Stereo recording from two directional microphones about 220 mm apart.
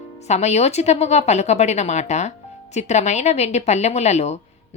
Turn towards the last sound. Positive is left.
turn(degrees=30)  # may be behind; listen again after turning